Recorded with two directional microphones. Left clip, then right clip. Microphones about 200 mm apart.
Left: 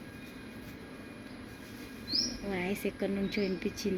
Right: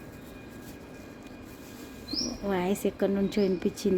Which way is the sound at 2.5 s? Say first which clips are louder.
Right 6 dB; 25° right (ahead or behind).